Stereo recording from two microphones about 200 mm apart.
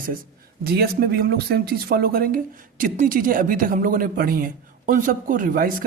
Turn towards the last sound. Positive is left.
turn(degrees=-45)  # may be behind; listen again after turning